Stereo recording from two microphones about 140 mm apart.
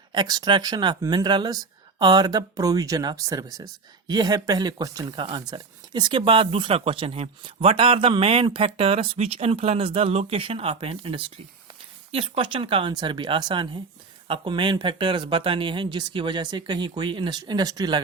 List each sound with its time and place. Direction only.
0.1 s speech: 30° right (ahead or behind)